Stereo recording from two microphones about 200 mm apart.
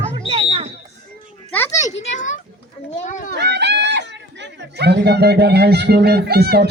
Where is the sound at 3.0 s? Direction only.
40° left (ahead or behind).